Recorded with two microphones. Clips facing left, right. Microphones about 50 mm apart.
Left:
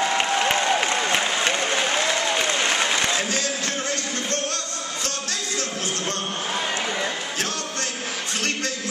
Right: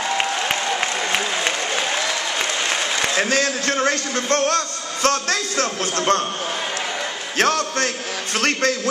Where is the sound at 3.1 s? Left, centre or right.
Right.